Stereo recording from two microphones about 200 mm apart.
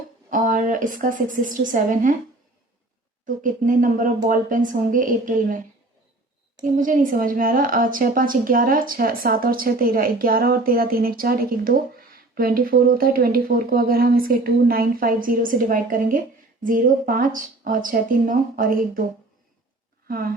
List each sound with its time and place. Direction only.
0.3 s a woman's voice: 40° right (ahead or behind)
3.2 s a woman's voice: 40° right (ahead or behind)
6.7 s speech: 40° right (ahead or behind)
20.1 s speech: 45° right (ahead or behind)